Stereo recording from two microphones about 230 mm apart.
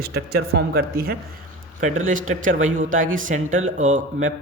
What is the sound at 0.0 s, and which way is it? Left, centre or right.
Speech, right.